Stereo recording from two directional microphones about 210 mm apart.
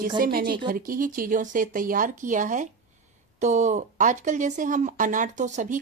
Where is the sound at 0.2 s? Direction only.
40° right (ahead or behind).